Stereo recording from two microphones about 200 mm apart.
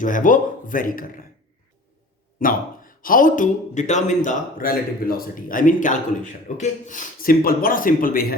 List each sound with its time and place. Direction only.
0.0 s speech: 40° left (ahead or behind)
2.4 s speech: 45° left (ahead or behind)